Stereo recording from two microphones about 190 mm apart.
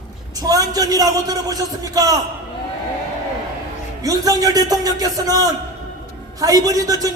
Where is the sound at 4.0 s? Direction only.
20° right (ahead or behind).